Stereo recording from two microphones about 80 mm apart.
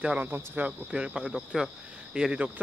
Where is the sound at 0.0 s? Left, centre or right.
Centre.